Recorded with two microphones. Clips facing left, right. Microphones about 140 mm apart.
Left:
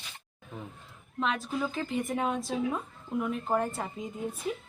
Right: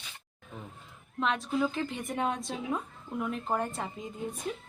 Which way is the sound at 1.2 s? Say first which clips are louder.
Right 2 dB; centre (ahead or behind).